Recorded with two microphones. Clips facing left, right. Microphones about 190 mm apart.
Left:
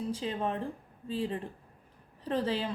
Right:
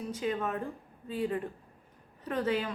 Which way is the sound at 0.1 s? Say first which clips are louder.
Right 4 dB; 30° left (ahead or behind).